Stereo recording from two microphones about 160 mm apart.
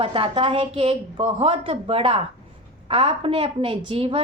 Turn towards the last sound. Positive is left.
turn(degrees=-35)  # may be behind; listen again after turning